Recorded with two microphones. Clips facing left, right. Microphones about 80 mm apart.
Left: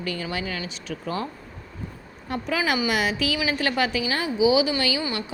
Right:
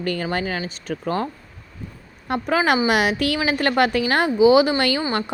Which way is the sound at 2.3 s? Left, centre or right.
Right.